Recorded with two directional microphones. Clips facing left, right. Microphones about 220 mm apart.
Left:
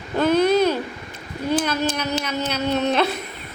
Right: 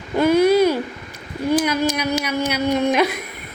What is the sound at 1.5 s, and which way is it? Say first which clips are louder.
Speech: right 3 dB; 10° right (ahead or behind).